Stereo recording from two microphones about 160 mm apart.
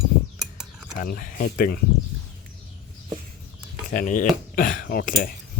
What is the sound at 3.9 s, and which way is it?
Speech, 55° left (ahead or behind).